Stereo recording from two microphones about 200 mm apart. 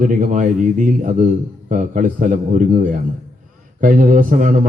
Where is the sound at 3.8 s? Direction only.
40° right (ahead or behind).